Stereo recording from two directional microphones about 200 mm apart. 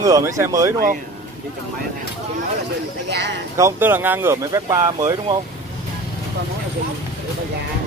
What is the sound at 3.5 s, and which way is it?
Speech, 10° right (ahead or behind).